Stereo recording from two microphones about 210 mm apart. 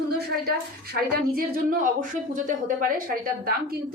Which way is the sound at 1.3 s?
40° right (ahead or behind).